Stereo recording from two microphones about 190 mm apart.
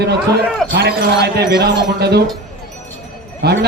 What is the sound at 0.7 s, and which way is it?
A man's voice, 60° right (ahead or behind).